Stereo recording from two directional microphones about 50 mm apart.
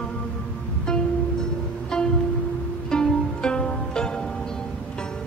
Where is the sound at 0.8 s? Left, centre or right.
Centre.